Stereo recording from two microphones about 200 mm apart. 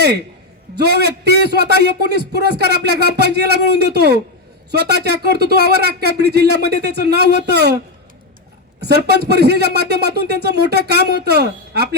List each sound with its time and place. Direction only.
0.8 s a man's voice: 55° right (ahead or behind)
8.8 s speech: 55° right (ahead or behind)